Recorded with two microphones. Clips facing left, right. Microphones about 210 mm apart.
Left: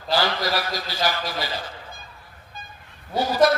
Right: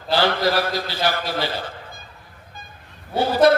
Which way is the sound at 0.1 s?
55° right (ahead or behind).